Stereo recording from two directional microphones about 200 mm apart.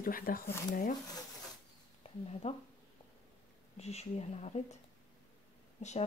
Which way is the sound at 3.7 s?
35° left (ahead or behind).